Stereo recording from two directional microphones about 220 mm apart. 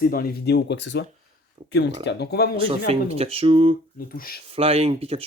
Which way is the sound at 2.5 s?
25° right (ahead or behind).